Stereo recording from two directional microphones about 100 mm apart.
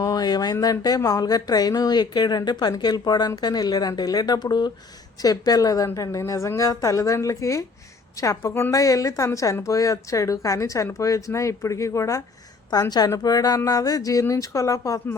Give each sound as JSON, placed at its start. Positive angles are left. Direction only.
{"t": 0.0, "sound": "a woman's voice", "side_deg": 40}